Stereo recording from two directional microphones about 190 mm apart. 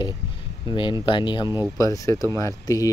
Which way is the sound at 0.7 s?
25° left (ahead or behind).